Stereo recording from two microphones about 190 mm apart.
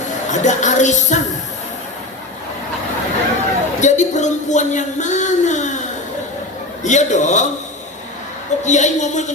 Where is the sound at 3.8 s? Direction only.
40° left (ahead or behind).